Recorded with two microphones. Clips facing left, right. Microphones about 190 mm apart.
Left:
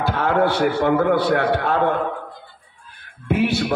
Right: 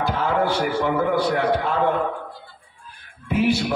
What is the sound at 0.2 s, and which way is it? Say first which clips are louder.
A man's voice: left 5 dB; 65° left (ahead or behind).